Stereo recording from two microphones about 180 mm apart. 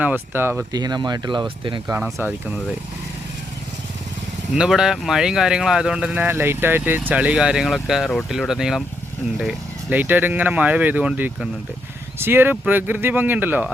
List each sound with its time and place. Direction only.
0.0 s speech: 10° right (ahead or behind); by 1.8 s 25° right (ahead or behind)
2.1 s speech: 10° right (ahead or behind)
4.5 s speech: 5° right (ahead or behind)